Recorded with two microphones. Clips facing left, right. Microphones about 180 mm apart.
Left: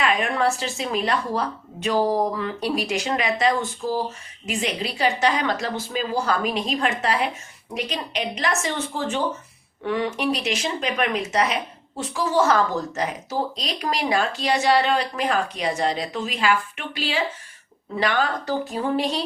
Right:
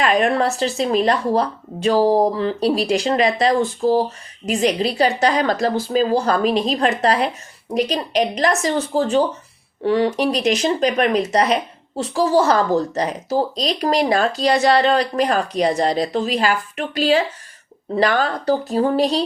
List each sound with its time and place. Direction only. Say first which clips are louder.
0.0 s speech: right 5 dB; 35° right (ahead or behind)